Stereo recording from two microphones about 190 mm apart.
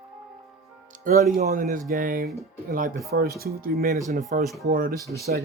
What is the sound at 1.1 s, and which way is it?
Speech, 45° right (ahead or behind).